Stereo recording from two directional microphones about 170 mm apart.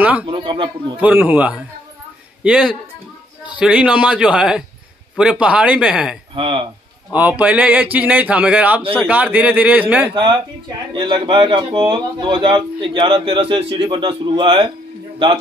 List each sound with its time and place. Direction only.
0.3 s speech: 30° right (ahead or behind)
1.0 s a man's voice: 10° right (ahead or behind)
6.3 s speech: 30° right (ahead or behind)
7.1 s speech: 10° right (ahead or behind)
10.1 s speech: 30° right (ahead or behind)